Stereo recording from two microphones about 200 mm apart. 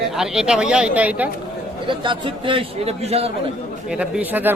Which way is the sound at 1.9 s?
25° right (ahead or behind).